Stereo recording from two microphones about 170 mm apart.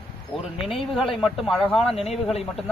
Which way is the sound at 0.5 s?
35° left (ahead or behind).